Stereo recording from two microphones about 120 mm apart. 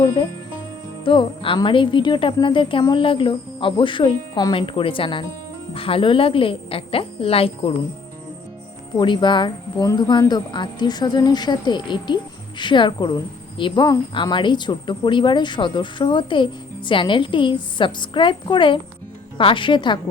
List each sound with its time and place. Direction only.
1.0 s speech: 45° left (ahead or behind)
9.0 s speech: 40° left (ahead or behind)